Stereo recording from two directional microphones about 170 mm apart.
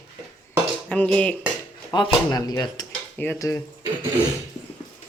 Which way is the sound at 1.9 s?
25° left (ahead or behind).